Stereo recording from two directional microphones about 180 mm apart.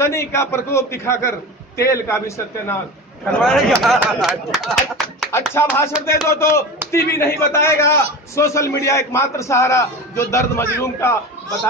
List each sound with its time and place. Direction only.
0.0 s a man's voice: 15° left (ahead or behind)
3.8 s speech: centre (ahead or behind)
5.3 s a man's voice: 15° left (ahead or behind)